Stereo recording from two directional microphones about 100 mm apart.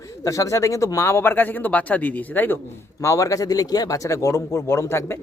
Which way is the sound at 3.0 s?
30° left (ahead or behind).